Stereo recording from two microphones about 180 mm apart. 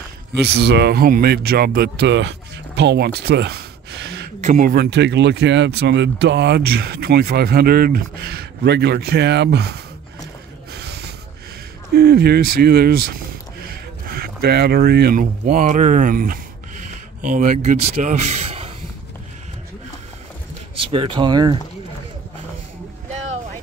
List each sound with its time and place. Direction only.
0.3 s speech: 65° right (ahead or behind)
4.4 s speech: 45° right (ahead or behind); by 9.7 s 70° right (ahead or behind)
10.7 s snort: 65° right (ahead or behind)
11.9 s speech: 60° right (ahead or behind); by 18.7 s 35° right (ahead or behind)
20.9 s speech: 30° right (ahead or behind)